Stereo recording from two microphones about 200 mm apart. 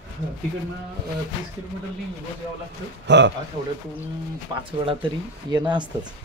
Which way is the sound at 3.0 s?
60° right (ahead or behind).